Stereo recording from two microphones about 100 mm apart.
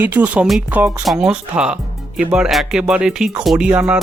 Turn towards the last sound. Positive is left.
turn(degrees=-10)  # may be behind; listen again after turning